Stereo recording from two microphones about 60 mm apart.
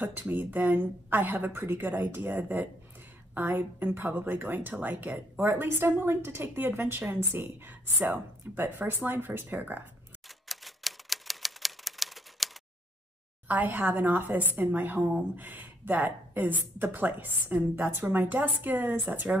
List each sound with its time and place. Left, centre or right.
0.3 s a woman's voice: right
10.2 s typewriter: centre
13.5 s a woman's voice: right